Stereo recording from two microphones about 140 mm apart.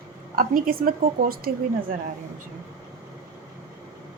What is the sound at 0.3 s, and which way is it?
A woman's voice, 90° right.